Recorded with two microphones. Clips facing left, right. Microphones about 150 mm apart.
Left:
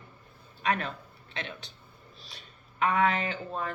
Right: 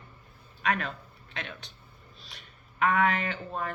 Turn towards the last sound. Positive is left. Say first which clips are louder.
# even
turn(degrees=30)  # may be behind; listen again after turning